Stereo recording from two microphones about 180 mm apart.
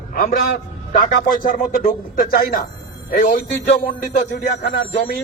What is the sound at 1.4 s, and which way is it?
A man's voice, 50° left (ahead or behind).